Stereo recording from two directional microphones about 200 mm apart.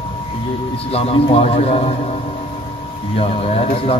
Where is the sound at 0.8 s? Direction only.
30° left (ahead or behind).